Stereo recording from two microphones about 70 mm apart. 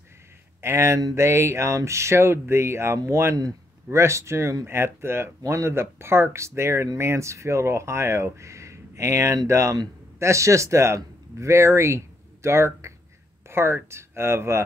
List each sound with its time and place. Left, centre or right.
0.6 s speech: right